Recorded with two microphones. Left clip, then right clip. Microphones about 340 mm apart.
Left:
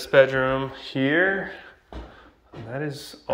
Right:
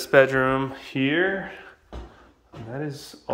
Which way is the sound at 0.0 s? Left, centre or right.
Centre.